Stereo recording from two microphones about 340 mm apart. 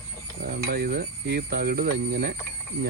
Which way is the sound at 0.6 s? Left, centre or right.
Right.